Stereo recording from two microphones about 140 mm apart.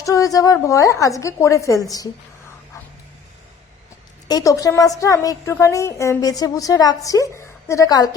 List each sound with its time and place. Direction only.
0.0 s a woman's voice: 25° left (ahead or behind)
4.3 s a woman's voice: 25° left (ahead or behind)